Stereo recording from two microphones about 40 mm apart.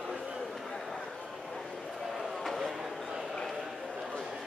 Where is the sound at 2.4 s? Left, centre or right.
Centre.